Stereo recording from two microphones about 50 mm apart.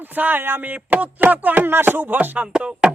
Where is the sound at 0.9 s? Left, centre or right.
Right.